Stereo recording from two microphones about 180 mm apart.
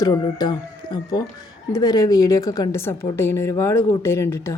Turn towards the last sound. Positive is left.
turn(degrees=15)  # may be behind; listen again after turning